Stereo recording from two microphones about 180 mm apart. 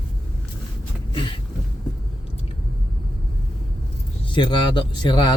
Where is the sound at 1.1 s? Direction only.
25° left (ahead or behind).